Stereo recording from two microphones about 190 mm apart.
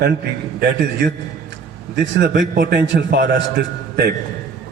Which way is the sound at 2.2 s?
60° right (ahead or behind).